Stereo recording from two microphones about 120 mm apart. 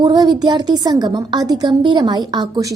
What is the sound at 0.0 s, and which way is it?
A woman's voice, 35° right (ahead or behind).